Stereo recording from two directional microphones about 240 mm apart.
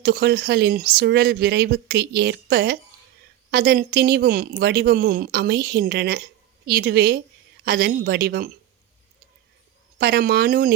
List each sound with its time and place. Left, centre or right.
0.0 s a woman's voice: right
10.0 s a woman's voice: right